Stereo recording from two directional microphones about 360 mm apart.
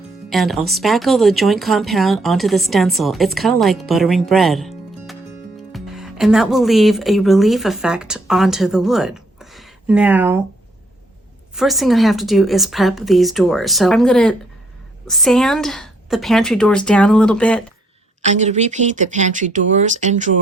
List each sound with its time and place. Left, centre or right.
0.3 s speech: centre
11.5 s speech: centre
18.2 s speech: centre